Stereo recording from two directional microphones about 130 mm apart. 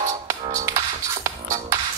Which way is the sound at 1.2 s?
25° right (ahead or behind).